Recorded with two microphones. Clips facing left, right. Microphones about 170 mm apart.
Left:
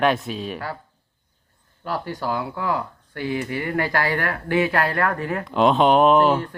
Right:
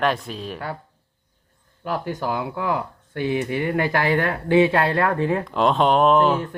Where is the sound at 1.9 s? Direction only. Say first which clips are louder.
Right 1 dB; 15° right (ahead or behind).